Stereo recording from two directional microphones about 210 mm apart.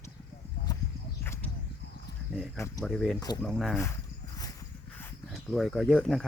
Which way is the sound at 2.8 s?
Centre (ahead or behind).